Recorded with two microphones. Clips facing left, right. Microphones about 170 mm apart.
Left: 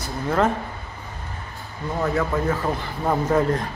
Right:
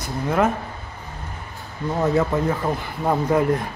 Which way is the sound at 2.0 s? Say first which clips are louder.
Right 2 dB; 20° right (ahead or behind).